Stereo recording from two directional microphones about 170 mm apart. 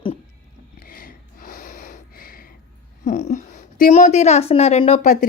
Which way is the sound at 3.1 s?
50° left (ahead or behind).